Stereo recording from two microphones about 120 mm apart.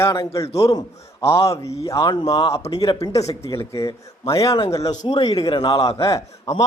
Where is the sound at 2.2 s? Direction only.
50° left (ahead or behind).